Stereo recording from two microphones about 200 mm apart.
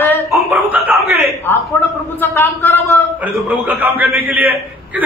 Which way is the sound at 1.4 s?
10° left (ahead or behind).